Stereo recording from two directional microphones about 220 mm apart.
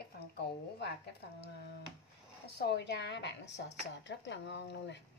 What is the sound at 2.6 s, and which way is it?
Speech, 50° left (ahead or behind).